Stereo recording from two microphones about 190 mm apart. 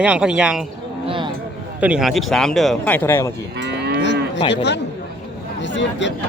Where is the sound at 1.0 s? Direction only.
25° right (ahead or behind).